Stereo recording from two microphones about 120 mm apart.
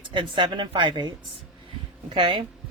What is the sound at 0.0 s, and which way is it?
Speech, 45° right (ahead or behind).